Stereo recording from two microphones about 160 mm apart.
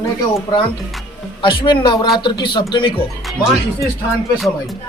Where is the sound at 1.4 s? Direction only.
30° left (ahead or behind).